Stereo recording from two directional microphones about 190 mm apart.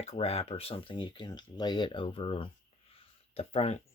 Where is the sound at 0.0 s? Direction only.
35° left (ahead or behind).